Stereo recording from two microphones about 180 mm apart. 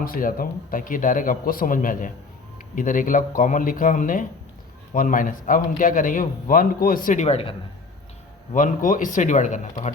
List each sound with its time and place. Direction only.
0.0 s a man's voice: 50° left (ahead or behind); by 7.5 s 35° left (ahead or behind)
8.5 s a man's voice: 45° left (ahead or behind)